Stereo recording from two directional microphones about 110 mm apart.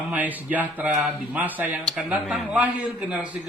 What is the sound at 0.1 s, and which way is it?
Speech, 15° right (ahead or behind).